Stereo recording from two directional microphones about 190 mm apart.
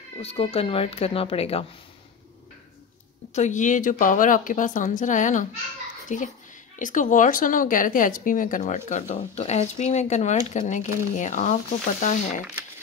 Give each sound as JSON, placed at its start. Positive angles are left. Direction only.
{"t": 0.2, "sound": "a woman's voice", "side_deg": 30}
{"t": 3.3, "sound": "a woman's voice", "side_deg": 40}